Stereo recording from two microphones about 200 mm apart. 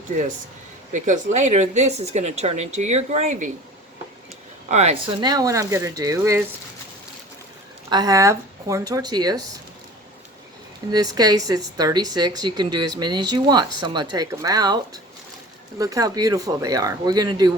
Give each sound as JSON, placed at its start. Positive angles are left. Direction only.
{"t": 1.0, "sound": "a woman's voice", "side_deg": -35}
{"t": 4.7, "sound": "speech", "side_deg": -30}
{"t": 7.9, "sound": "speech", "side_deg": -20}
{"t": 10.9, "sound": "speech", "side_deg": -20}